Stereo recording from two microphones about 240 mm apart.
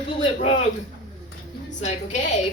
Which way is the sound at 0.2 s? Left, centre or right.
Left.